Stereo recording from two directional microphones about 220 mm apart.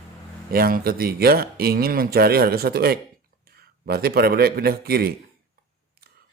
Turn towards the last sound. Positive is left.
turn(degrees=-45)  # may be behind; listen again after turning